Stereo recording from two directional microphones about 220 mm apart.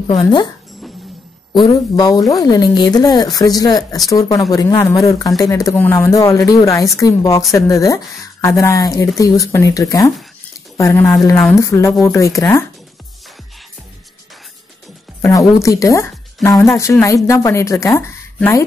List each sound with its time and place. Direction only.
0.1 s speech: 20° left (ahead or behind)
1.5 s a woman's voice: 20° left (ahead or behind)
15.2 s a woman's voice: 15° left (ahead or behind)